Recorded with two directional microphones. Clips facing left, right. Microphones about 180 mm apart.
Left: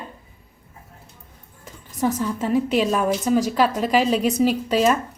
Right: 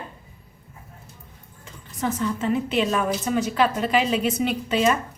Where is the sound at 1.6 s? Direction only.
40° left (ahead or behind).